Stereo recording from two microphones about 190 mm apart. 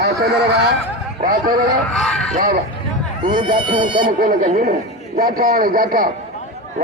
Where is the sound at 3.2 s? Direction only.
25° right (ahead or behind).